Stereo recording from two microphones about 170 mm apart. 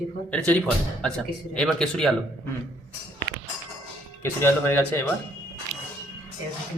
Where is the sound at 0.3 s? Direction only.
5° left (ahead or behind).